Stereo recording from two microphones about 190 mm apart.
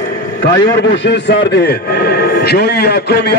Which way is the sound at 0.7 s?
70° left (ahead or behind).